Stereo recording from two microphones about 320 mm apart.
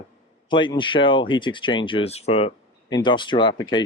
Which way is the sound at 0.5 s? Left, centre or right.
Centre.